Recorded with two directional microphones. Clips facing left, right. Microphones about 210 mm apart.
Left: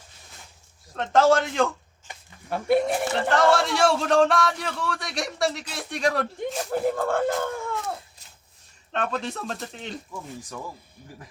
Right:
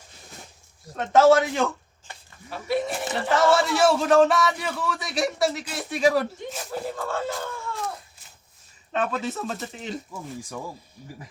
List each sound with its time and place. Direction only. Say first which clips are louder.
0.9 s a man's voice: right 3 dB; 5° right (ahead or behind)
2.5 s speech: left 5 dB; 55° left (ahead or behind)
3.1 s a man's voice: right 1 dB; 5° right (ahead or behind)
6.7 s speech: left 6 dB; 55° left (ahead or behind)
8.9 s a man's voice: right 2 dB; 5° right (ahead or behind)